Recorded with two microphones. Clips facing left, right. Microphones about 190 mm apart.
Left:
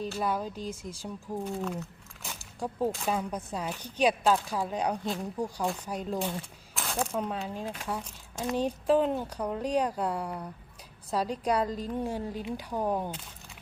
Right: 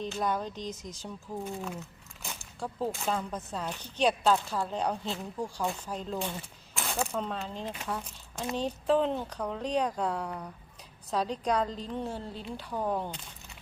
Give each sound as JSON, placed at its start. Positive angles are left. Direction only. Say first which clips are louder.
{"t": 0.0, "sound": "speech", "louder": "left 1 dB", "side_deg": 5}
{"t": 1.5, "sound": "speech", "louder": "left 5 dB", "side_deg": 0}
{"t": 2.2, "sound": "a sound", "louder": "even", "side_deg": 0}
{"t": 3.1, "sound": "speech", "louder": "left 2 dB", "side_deg": 10}
{"t": 6.7, "sound": "coin", "louder": "left 1 dB", "side_deg": 0}
{"t": 7.1, "sound": "speech", "louder": "left 2 dB", "side_deg": 10}